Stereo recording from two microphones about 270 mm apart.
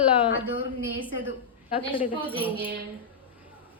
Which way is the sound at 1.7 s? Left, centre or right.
Centre.